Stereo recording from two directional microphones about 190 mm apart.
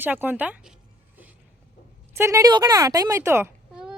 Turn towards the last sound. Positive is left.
turn(degrees=-15)  # may be behind; listen again after turning